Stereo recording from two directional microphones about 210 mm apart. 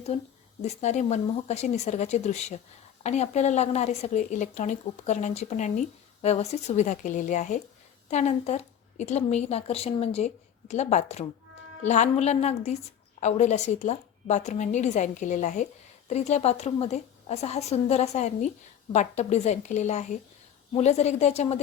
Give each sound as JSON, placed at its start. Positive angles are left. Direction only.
{"t": 0.1, "sound": "a woman's voice", "side_deg": 30}